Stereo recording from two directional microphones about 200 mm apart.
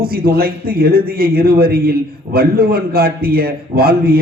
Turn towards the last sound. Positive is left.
turn(degrees=-50)  # may be behind; listen again after turning